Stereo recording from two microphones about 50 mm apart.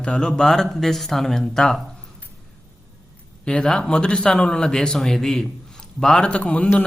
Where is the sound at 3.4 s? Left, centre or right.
Centre.